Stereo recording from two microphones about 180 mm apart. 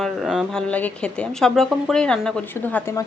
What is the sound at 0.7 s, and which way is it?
Speech, 5° left (ahead or behind).